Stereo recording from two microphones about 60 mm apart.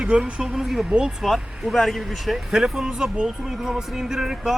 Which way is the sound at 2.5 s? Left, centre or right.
Centre.